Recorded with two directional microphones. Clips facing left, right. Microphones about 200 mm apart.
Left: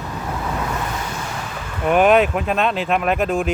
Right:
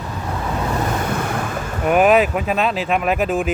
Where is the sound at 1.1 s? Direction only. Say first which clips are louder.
Right 6 dB; 55° right (ahead or behind).